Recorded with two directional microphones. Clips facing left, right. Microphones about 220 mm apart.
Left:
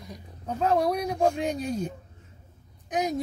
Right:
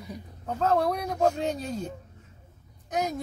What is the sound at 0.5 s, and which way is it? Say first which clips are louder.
Speech: left 1 dB; 15° left (ahead or behind).